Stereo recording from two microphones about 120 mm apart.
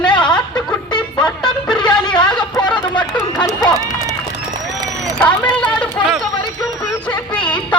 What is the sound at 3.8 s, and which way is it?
Run, 30° right (ahead or behind).